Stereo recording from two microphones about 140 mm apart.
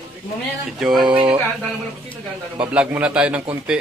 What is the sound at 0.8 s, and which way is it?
Speech, centre (ahead or behind).